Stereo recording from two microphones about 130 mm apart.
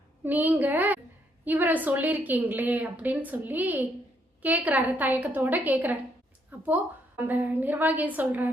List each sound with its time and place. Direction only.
0.3 s a woman's voice: 15° right (ahead or behind)